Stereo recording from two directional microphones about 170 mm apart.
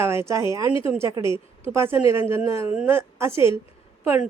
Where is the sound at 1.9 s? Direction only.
15° right (ahead or behind).